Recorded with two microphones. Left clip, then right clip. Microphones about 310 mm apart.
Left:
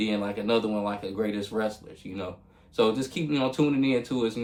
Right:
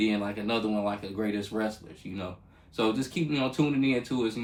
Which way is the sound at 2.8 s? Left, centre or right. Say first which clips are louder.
Left 4 dB; centre.